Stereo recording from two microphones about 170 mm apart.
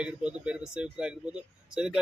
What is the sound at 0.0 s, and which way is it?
Speech, 5° right (ahead or behind).